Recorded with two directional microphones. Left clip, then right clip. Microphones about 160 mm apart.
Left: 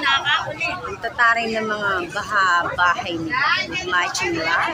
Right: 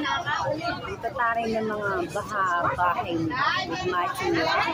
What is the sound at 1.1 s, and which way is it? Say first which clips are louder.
Speech: left 8 dB; 10° left (ahead or behind).